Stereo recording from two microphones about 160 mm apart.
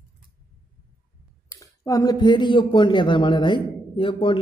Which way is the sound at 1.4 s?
20° left (ahead or behind).